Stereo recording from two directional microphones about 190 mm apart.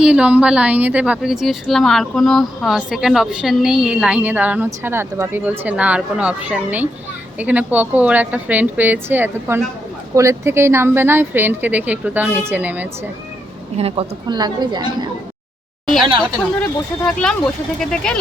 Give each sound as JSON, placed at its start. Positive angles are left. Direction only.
{"t": 0.0, "sound": "a woman's voice", "side_deg": -5}
{"t": 13.7, "sound": "a woman's voice", "side_deg": -30}
{"t": 17.1, "sound": "a woman's voice", "side_deg": 5}